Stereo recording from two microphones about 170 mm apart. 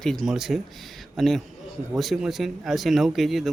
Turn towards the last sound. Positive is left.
turn(degrees=0)  # may be behind; listen again after turning